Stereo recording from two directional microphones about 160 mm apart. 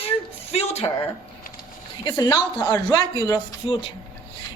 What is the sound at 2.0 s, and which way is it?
A woman's voice, 25° left (ahead or behind).